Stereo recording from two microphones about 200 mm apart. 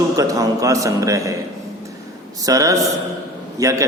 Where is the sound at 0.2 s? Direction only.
15° right (ahead or behind).